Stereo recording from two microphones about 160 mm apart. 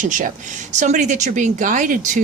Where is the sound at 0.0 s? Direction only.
55° right (ahead or behind).